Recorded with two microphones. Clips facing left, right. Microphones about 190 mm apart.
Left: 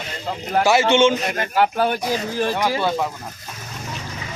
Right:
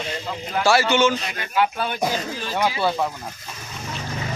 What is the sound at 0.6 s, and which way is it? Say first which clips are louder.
Speech: left 2 dB; 20° left (ahead or behind).